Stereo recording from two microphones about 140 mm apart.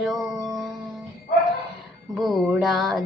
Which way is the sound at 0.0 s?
Centre (ahead or behind).